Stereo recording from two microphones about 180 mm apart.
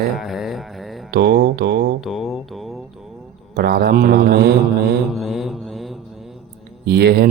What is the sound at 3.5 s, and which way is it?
Speech, 60° right (ahead or behind).